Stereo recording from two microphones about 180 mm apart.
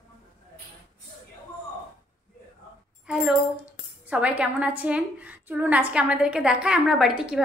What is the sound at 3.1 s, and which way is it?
Speech, 5° right (ahead or behind).